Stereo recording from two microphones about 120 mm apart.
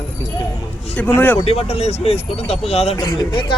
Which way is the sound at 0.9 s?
15° left (ahead or behind).